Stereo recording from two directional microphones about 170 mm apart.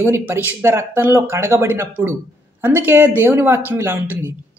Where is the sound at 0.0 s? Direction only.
15° right (ahead or behind).